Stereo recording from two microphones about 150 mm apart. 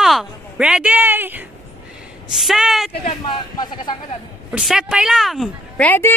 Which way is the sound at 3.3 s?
30° left (ahead or behind).